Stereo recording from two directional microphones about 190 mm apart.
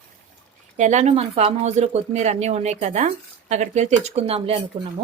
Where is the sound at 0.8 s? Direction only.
40° right (ahead or behind).